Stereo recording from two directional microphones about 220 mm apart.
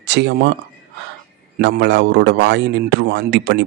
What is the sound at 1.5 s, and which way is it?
A man's voice, 50° right (ahead or behind).